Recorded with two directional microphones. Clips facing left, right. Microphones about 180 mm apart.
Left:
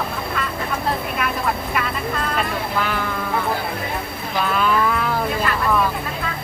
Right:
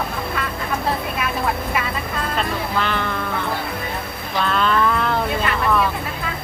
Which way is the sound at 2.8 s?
5° left (ahead or behind).